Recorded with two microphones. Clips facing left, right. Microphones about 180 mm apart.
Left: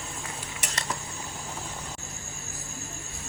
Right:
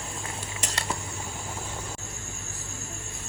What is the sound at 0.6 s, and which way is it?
Dishes, 35° right (ahead or behind).